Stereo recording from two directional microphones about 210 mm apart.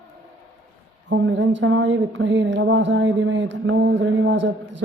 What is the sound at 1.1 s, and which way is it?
Speech, 60° right (ahead or behind).